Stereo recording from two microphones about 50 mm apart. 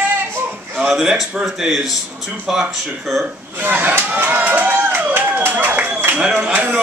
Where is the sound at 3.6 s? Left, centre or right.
Right.